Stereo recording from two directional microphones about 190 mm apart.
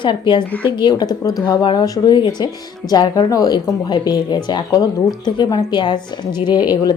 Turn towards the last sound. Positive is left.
turn(degrees=20)  # may be behind; listen again after turning